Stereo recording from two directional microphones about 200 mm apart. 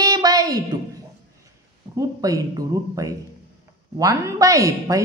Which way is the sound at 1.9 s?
15° right (ahead or behind).